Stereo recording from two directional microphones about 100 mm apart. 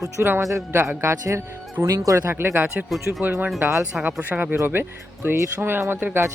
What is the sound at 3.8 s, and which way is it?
A man's voice, 10° right (ahead or behind).